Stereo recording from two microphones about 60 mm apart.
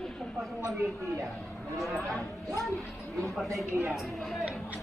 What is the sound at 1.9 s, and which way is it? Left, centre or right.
Speech, right.